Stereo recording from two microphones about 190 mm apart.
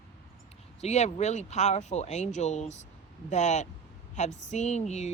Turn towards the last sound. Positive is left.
turn(degrees=35)  # may be behind; listen again after turning